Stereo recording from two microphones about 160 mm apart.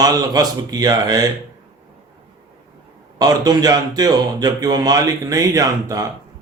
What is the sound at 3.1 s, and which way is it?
Speech, 25° right (ahead or behind).